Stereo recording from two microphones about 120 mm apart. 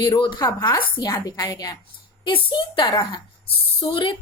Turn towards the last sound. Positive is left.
turn(degrees=45)  # may be behind; listen again after turning